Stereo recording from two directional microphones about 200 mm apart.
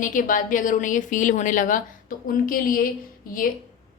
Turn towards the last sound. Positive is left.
turn(degrees=45)  # may be behind; listen again after turning